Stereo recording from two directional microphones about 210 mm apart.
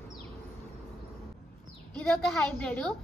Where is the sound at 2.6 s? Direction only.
5° left (ahead or behind).